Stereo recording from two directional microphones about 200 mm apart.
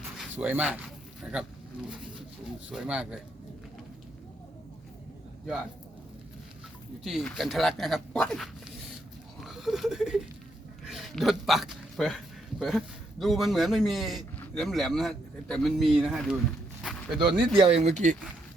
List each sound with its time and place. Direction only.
0.2 s speech: 10° right (ahead or behind)
2.6 s a man's voice: 5° right (ahead or behind)
7.0 s a man's voice: centre (ahead or behind)
10.8 s hiccup: centre (ahead or behind)
12.5 s a man's voice: centre (ahead or behind)
16.8 s a sound: centre (ahead or behind)
17.6 s speech: 30° right (ahead or behind)